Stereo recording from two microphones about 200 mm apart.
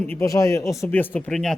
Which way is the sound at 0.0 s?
10° left (ahead or behind).